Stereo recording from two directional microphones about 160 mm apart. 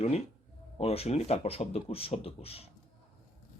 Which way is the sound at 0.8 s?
40° left (ahead or behind).